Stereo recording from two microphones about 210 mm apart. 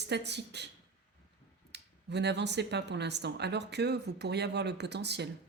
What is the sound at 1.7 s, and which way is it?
Speech, 55° right (ahead or behind).